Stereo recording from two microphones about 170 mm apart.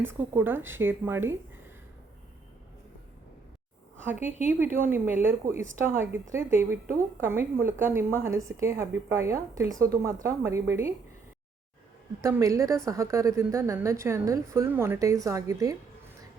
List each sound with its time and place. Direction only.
0.0 s a woman's voice: 15° right (ahead or behind)
4.0 s a woman's voice: 10° right (ahead or behind)
12.2 s a woman's voice: 15° right (ahead or behind)